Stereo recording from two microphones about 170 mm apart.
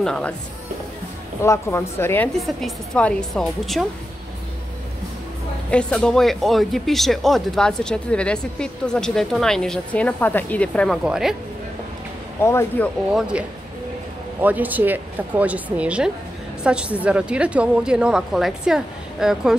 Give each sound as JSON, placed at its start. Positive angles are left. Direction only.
{"t": 0.0, "sound": "speech", "side_deg": 5}
{"t": 1.4, "sound": "speech", "side_deg": 15}
{"t": 2.3, "sound": "speech", "side_deg": 0}
{"t": 5.7, "sound": "speech", "side_deg": 5}
{"t": 12.4, "sound": "speech", "side_deg": 15}
{"t": 13.1, "sound": "a woman's voice", "side_deg": -5}